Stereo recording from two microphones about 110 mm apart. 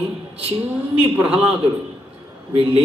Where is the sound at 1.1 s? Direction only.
15° right (ahead or behind).